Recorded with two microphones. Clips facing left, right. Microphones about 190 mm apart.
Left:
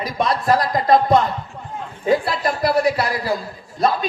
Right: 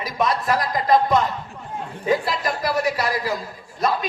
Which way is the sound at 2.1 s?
30° left (ahead or behind).